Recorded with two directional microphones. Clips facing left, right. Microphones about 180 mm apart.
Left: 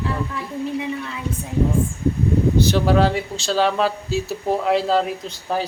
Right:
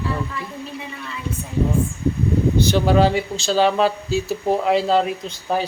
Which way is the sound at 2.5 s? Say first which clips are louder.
Right 2 dB; centre (ahead or behind).